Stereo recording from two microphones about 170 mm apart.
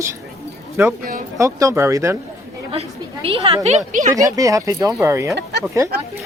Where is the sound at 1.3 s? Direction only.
20° right (ahead or behind).